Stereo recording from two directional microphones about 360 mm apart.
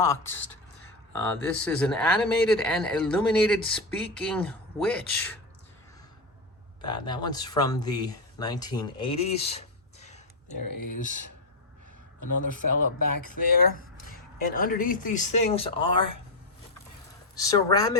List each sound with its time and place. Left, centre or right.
0.0 s a woman's voice: centre
6.8 s speech: centre
10.6 s speech: left
12.2 s speech: left
14.3 s speech: left
17.3 s a woman's voice: centre